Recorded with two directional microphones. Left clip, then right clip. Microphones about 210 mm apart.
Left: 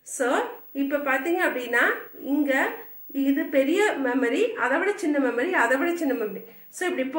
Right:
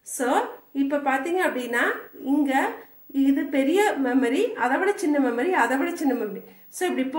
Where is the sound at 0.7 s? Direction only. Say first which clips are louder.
Right 1 dB; 50° right (ahead or behind).